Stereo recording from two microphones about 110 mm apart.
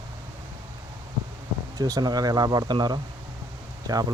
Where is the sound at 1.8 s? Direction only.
30° right (ahead or behind).